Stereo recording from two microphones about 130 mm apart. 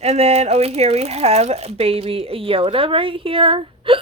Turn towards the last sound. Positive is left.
turn(degrees=-45)  # may be behind; listen again after turning